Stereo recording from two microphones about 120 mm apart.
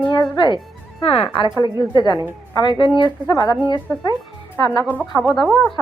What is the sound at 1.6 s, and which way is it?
Speech, 35° left (ahead or behind).